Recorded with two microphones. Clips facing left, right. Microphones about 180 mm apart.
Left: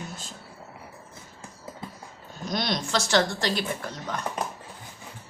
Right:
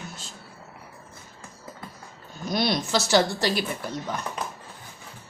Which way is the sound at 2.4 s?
5° right (ahead or behind).